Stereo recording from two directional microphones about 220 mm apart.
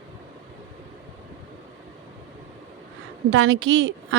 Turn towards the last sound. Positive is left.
turn(degrees=-65)  # may be behind; listen again after turning